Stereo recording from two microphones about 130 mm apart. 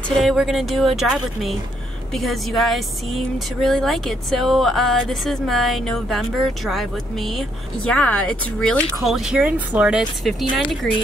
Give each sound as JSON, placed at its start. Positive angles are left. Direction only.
{"t": 0.2, "sound": "speech", "side_deg": 0}
{"t": 9.0, "sound": "speech", "side_deg": -5}